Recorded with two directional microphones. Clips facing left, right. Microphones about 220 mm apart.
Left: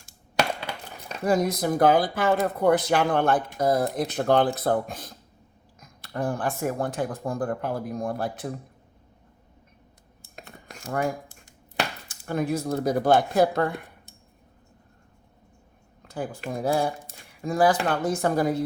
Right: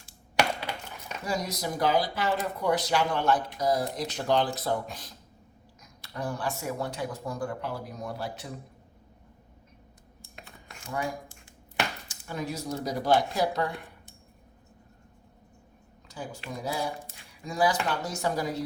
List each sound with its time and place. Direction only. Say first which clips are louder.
1.2 s speech: left 9 dB; 55° left (ahead or behind)
10.3 s a sound: left 5 dB; 40° left (ahead or behind)
10.9 s speech: left 6 dB; 50° left (ahead or behind)
16.0 s speech: left 7 dB; 55° left (ahead or behind)